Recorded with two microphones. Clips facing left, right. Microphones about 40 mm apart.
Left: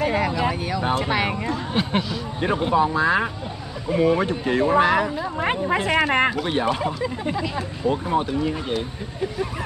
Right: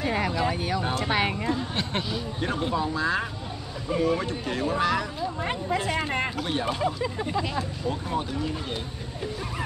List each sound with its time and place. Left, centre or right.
0.3 s vehicle: centre
0.6 s speech: centre
0.8 s speech: centre
1.7 s a sound: centre
2.4 s speech: left
5.2 s speech: left
6.3 s speech: left